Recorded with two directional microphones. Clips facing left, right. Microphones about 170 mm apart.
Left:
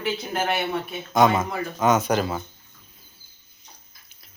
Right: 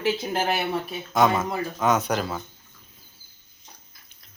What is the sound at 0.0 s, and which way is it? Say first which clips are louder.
Speech: right 2 dB; 30° right (ahead or behind).